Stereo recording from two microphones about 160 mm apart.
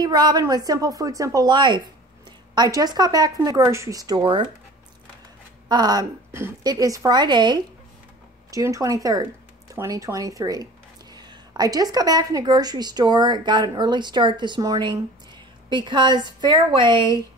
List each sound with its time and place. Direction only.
0.0 s speech: 25° right (ahead or behind)
5.7 s speech: 25° right (ahead or behind)